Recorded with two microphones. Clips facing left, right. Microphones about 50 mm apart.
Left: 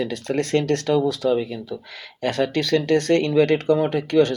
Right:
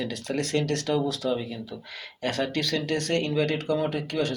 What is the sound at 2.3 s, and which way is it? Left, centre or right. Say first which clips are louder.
Speech: left 6 dB; left.